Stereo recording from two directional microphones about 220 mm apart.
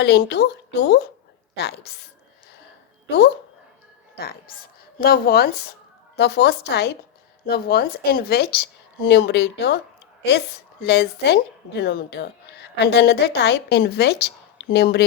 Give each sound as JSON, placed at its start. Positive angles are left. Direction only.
{"t": 0.0, "sound": "a woman's voice", "side_deg": 50}
{"t": 4.2, "sound": "a woman's voice", "side_deg": 45}